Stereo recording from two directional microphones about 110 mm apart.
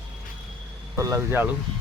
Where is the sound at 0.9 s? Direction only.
30° right (ahead or behind).